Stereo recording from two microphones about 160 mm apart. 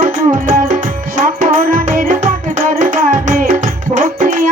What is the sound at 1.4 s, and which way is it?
Music, 55° right (ahead or behind).